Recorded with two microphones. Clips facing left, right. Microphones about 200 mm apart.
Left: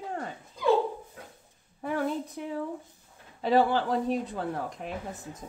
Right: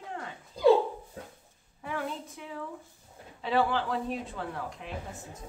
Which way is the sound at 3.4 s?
40° left (ahead or behind).